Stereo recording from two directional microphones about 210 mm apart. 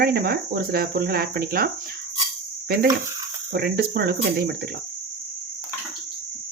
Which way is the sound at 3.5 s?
50° right (ahead or behind).